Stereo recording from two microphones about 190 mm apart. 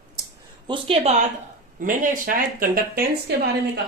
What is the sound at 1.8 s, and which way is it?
Speech, 45° right (ahead or behind).